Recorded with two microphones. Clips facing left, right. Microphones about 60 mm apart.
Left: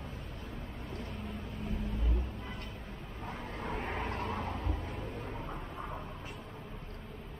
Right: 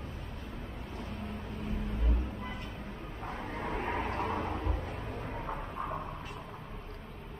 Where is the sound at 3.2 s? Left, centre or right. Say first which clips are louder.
Right 3 dB; centre.